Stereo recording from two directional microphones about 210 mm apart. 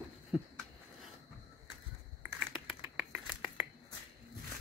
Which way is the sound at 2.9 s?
5° right (ahead or behind).